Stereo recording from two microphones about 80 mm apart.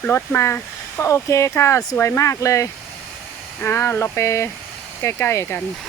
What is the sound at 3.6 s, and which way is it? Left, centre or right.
Speech, left.